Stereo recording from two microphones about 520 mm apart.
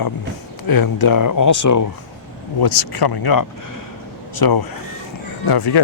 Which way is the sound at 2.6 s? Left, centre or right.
Left.